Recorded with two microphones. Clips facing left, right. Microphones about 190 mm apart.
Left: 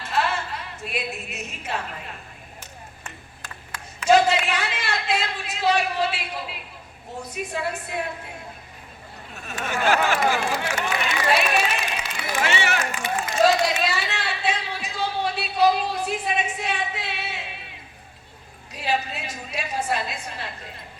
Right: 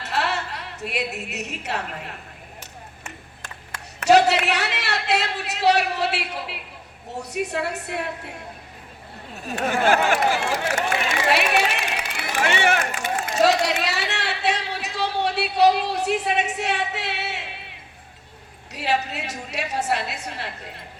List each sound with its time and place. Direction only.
0.0 s a woman's voice: 70° right (ahead or behind)
4.0 s a man's voice: 70° right (ahead or behind)
9.6 s a sound: 50° right (ahead or behind)
11.3 s run: 70° right (ahead or behind)
18.7 s a man's voice: 70° right (ahead or behind)